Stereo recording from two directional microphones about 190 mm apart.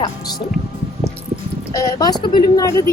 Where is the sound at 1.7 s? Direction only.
20° left (ahead or behind).